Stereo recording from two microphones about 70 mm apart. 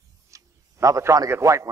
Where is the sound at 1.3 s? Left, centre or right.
Right.